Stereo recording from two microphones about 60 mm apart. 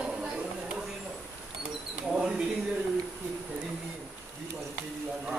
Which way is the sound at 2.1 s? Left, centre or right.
Centre.